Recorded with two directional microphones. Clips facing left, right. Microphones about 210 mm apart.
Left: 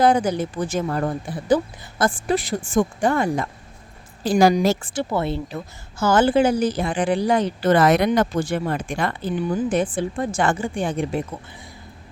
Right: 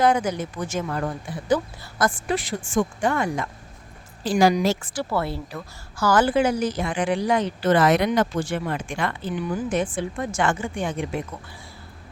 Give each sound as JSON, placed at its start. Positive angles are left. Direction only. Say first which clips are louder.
{"t": 0.0, "sound": "a woman's voice", "louder": "left 3 dB", "side_deg": 35}
{"t": 4.9, "sound": "speech", "louder": "left 3 dB", "side_deg": 20}